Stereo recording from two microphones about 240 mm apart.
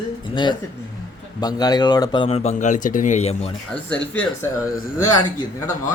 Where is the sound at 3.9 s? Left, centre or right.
Centre.